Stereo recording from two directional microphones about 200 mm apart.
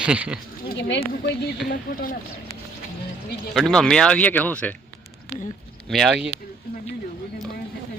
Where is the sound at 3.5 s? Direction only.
5° left (ahead or behind).